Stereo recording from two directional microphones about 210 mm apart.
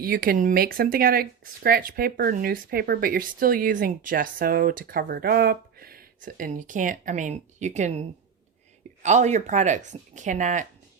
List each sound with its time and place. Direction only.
0.0 s speech: 45° right (ahead or behind)
9.0 s speech: 35° right (ahead or behind)